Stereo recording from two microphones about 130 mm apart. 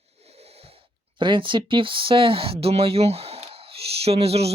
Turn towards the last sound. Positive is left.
turn(degrees=-50)  # may be behind; listen again after turning